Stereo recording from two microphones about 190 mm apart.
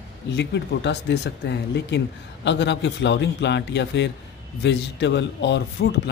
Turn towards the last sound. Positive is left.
turn(degrees=65)  # may be behind; listen again after turning